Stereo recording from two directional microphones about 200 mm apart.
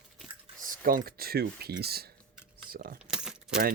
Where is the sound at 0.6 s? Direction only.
45° right (ahead or behind).